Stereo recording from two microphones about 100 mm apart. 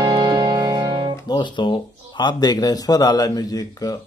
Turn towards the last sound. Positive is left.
turn(degrees=40)  # may be behind; listen again after turning